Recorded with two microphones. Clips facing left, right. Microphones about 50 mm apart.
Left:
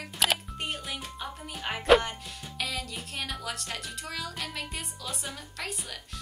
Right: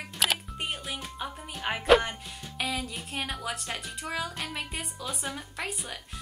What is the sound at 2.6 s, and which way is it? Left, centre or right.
Music, centre.